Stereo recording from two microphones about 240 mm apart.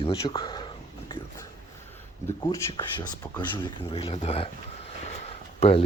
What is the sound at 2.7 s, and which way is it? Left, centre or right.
Speech, centre.